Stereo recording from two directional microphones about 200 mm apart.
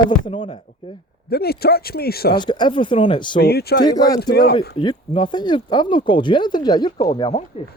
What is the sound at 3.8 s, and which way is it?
Speech, 20° left (ahead or behind).